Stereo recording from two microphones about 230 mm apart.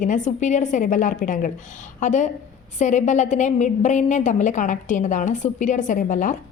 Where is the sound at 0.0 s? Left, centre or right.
Left.